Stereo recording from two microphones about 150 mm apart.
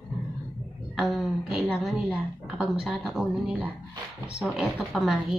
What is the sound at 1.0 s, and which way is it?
A woman's voice, centre (ahead or behind).